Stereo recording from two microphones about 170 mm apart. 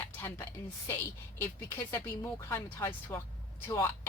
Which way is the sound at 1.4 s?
15° left (ahead or behind).